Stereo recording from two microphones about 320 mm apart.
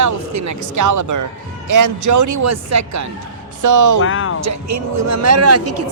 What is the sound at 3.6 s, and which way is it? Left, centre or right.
Speech, right.